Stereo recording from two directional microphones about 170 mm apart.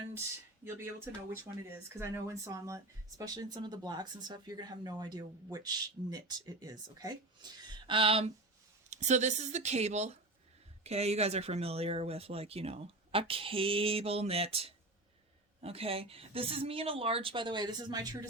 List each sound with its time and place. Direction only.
0.6 s speech: 15° right (ahead or behind); by 8.3 s 35° right (ahead or behind)
8.9 s speech: 45° right (ahead or behind); by 18.3 s 25° right (ahead or behind)